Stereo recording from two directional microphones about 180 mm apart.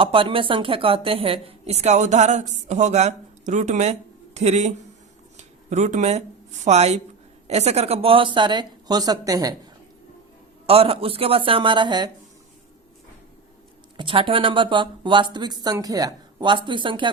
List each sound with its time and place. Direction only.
0.0 s a woman's voice: 30° right (ahead or behind)
10.7 s a woman's voice: 30° right (ahead or behind)
13.9 s speech: 30° right (ahead or behind)